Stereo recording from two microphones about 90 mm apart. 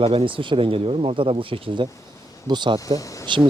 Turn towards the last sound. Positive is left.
turn(degrees=40)  # may be behind; listen again after turning